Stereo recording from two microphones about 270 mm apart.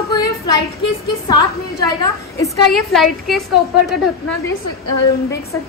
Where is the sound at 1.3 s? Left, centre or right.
Centre.